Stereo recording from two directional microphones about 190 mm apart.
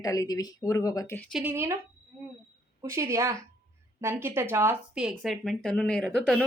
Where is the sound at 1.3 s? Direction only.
10° right (ahead or behind).